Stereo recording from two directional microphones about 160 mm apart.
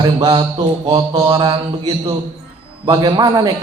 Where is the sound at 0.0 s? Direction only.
30° right (ahead or behind).